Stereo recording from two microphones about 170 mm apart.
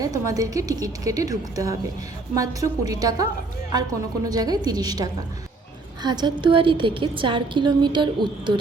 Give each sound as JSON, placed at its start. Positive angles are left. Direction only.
{"t": 0.0, "sound": "a woman's voice", "side_deg": -20}
{"t": 4.3, "sound": "a woman's voice", "side_deg": -20}